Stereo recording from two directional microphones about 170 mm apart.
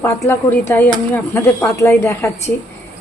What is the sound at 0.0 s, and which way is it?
A woman's voice, 15° left (ahead or behind).